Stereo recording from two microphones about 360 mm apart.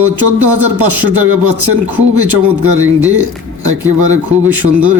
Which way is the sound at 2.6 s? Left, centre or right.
Centre.